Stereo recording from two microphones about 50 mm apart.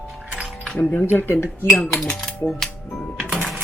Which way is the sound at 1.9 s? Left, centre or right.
Centre.